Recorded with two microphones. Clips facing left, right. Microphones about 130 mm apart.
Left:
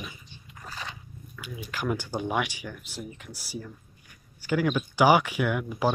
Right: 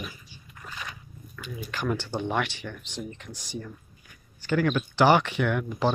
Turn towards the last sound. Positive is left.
turn(degrees=10)  # may be behind; listen again after turning